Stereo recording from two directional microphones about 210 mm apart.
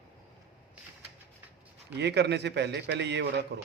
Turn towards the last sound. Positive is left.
turn(degrees=-55)  # may be behind; listen again after turning